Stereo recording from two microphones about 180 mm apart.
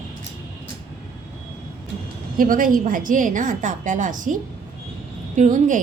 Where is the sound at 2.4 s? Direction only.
50° right (ahead or behind).